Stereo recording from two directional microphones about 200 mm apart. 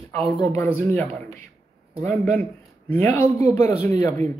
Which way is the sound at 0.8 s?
10° left (ahead or behind).